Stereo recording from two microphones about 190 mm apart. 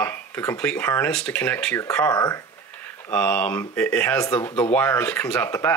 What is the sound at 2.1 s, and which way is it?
Speech, 20° left (ahead or behind).